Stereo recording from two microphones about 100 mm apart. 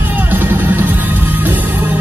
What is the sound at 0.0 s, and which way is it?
Music, 20° right (ahead or behind).